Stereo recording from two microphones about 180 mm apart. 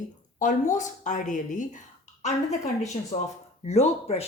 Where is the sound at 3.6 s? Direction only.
35° left (ahead or behind).